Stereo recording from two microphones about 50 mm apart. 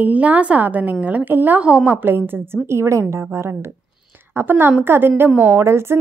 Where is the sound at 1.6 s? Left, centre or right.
Right.